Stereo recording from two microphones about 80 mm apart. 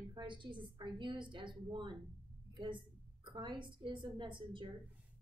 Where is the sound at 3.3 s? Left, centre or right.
Right.